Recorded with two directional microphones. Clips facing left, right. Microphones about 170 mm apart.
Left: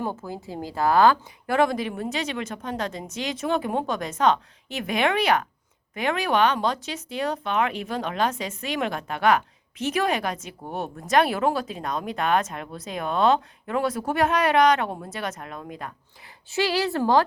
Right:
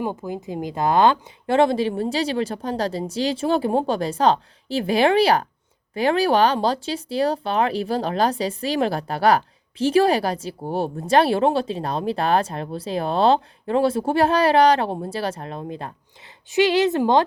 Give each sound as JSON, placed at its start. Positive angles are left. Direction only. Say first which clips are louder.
{"t": 0.0, "sound": "speech", "louder": "right 4 dB", "side_deg": -15}
{"t": 16.5, "sound": "speech", "louder": "right 6 dB", "side_deg": -20}